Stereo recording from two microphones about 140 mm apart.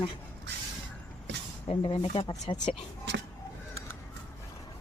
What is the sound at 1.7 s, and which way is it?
Speech, 45° left (ahead or behind).